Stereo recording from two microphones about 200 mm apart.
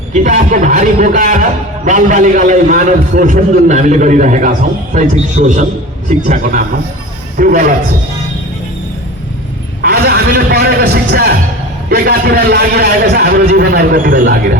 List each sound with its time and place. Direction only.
0.1 s a man's voice: 40° right (ahead or behind)
9.8 s a sound: 50° right (ahead or behind)
11.9 s a man's voice: 50° right (ahead or behind)